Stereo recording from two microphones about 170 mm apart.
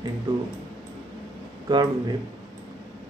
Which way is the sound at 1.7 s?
25° right (ahead or behind).